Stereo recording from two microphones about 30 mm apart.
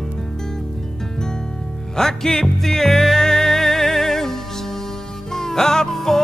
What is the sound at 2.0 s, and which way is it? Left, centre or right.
Music, centre.